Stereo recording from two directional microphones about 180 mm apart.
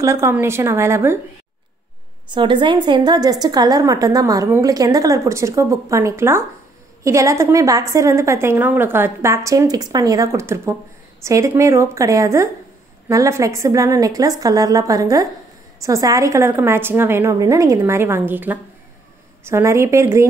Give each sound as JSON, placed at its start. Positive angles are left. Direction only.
{"t": 0.0, "sound": "a woman's voice", "side_deg": -15}
{"t": 2.3, "sound": "a woman's voice", "side_deg": -25}